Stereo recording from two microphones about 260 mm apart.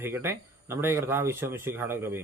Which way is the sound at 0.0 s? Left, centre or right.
Centre.